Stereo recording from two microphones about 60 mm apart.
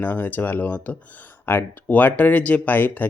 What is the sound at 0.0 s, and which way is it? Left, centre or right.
Speech, left.